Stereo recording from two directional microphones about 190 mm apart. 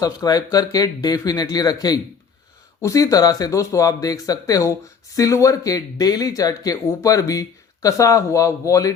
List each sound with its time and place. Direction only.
0.0 s speech: 20° left (ahead or behind)